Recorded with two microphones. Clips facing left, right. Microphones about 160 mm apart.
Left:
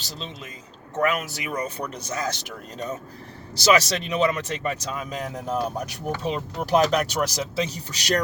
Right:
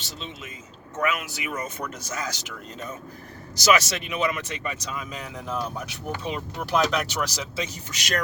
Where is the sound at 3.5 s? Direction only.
30° left (ahead or behind).